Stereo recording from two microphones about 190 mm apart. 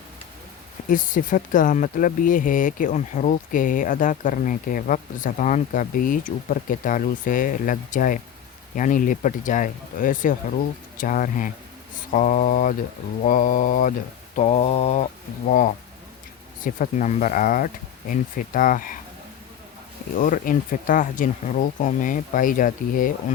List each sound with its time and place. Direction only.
0.9 s speech: 45° left (ahead or behind)
14.3 s mantra: 35° left (ahead or behind)
15.4 s speech: 45° left (ahead or behind)
20.1 s speech: 45° left (ahead or behind)